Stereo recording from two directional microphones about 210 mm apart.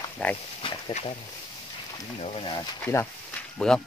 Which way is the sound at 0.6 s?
30° left (ahead or behind).